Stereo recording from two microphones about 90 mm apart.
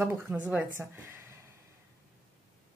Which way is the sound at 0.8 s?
30° right (ahead or behind).